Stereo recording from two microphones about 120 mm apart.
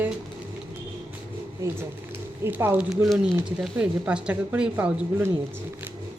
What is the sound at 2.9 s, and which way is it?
Speech, 5° right (ahead or behind).